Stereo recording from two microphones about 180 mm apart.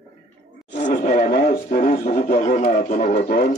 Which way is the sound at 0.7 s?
40° left (ahead or behind).